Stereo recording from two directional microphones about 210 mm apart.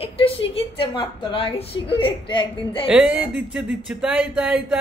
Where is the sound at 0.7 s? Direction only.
25° left (ahead or behind).